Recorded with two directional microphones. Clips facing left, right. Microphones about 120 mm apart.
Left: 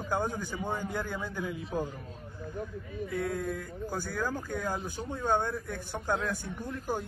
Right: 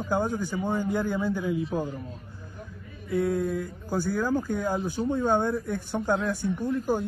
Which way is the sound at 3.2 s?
25° right (ahead or behind).